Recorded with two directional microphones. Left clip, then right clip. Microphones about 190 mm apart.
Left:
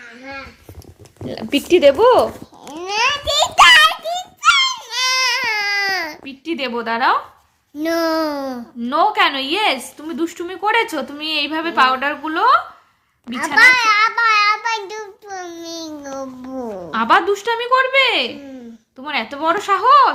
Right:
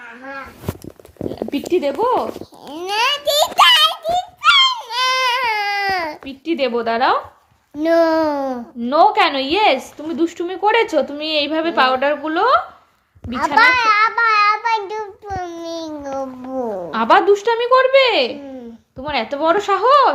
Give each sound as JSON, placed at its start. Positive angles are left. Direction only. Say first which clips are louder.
{"t": 1.4, "sound": "speech", "louder": "left 6 dB", "side_deg": 65}
{"t": 2.6, "sound": "a child's voice", "louder": "even", "side_deg": -10}
{"t": 3.8, "sound": "baby cry", "louder": "even", "side_deg": 25}
{"t": 6.2, "sound": "a woman's voice", "louder": "right 4 dB", "side_deg": 45}
{"t": 7.8, "sound": "a child's voice", "louder": "right 4 dB", "side_deg": 20}
{"t": 8.8, "sound": "a woman's voice", "louder": "right 2 dB", "side_deg": 45}
{"t": 13.6, "sound": "child singing", "louder": "left 1 dB", "side_deg": 25}
{"t": 16.1, "sound": "a sound", "louder": "right 5 dB", "side_deg": 20}
{"t": 16.9, "sound": "a woman's voice", "louder": "right 2 dB", "side_deg": 45}
{"t": 18.3, "sound": "a sound", "louder": "right 3 dB", "side_deg": 25}
{"t": 19.0, "sound": "a woman's voice", "louder": "right 2 dB", "side_deg": 45}